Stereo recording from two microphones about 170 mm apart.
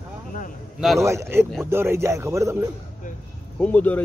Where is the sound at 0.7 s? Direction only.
Centre (ahead or behind).